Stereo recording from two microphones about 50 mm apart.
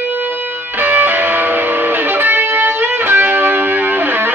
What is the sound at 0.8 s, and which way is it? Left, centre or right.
Music, right.